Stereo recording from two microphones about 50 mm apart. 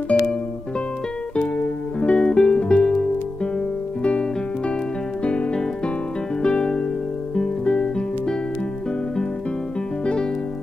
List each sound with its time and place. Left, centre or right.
0.1 s music: left
2.0 s music: left